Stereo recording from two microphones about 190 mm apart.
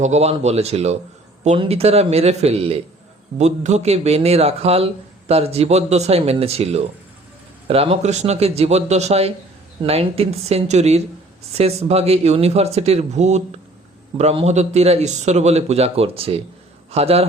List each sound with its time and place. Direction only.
0.0 s a man's voice: 35° right (ahead or behind)